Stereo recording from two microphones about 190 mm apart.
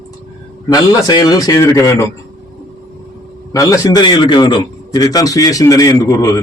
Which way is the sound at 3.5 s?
20° left (ahead or behind).